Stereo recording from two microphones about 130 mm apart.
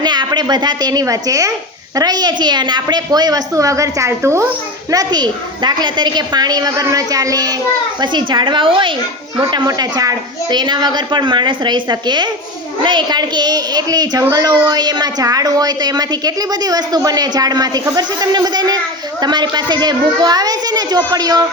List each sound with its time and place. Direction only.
0.0 s a woman's voice: 35° right (ahead or behind)